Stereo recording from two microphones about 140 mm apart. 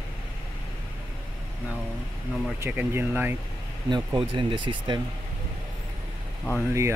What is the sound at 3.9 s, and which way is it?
Speech, 35° right (ahead or behind).